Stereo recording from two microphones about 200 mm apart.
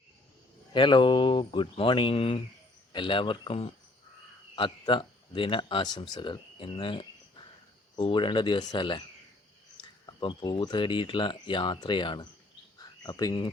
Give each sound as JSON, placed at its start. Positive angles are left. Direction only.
{"t": 0.7, "sound": "speech", "side_deg": 25}
{"t": 10.1, "sound": "speech", "side_deg": 25}